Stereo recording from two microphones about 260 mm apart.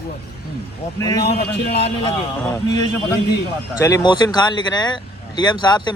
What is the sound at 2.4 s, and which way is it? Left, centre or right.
Speech, centre.